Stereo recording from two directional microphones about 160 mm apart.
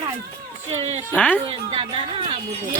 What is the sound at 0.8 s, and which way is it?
Speech, 35° right (ahead or behind).